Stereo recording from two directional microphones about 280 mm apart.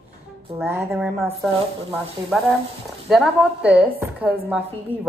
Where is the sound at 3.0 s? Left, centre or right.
Centre.